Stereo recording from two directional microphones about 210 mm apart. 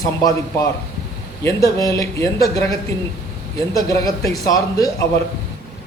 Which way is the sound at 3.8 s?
15° left (ahead or behind).